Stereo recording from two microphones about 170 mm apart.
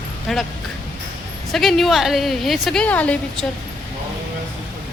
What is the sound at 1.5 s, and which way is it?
A woman's voice, centre (ahead or behind).